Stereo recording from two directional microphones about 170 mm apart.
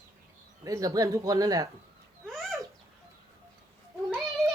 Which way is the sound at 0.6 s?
20° right (ahead or behind).